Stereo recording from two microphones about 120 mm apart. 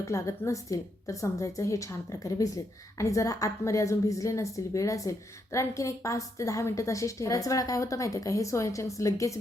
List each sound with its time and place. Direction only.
0.0 s a woman's voice: 25° left (ahead or behind)